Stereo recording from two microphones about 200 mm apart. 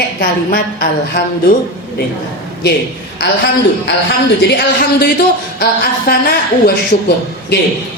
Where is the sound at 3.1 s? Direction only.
55° left (ahead or behind).